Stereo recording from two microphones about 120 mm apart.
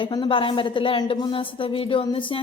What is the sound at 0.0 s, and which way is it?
A woman's voice, 40° left (ahead or behind).